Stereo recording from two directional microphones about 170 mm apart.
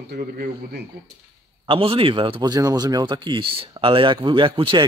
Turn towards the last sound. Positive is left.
turn(degrees=-30)  # may be behind; listen again after turning